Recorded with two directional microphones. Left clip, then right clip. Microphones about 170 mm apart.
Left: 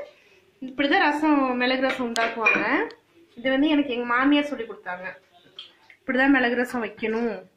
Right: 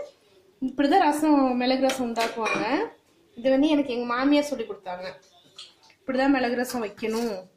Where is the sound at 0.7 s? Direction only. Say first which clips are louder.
Even; 60° right (ahead or behind).